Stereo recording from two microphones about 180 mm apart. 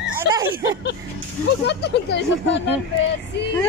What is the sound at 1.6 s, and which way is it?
Speech, 70° left (ahead or behind).